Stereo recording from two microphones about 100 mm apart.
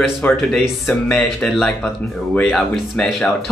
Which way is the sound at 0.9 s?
15° left (ahead or behind).